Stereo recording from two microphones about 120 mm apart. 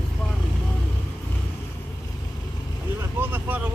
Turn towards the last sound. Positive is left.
turn(degrees=-15)  # may be behind; listen again after turning